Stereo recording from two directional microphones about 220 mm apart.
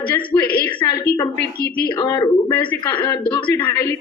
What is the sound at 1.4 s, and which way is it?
Speech, 50° left (ahead or behind).